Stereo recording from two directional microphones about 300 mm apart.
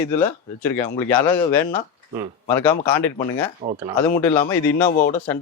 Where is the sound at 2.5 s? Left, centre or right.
Centre.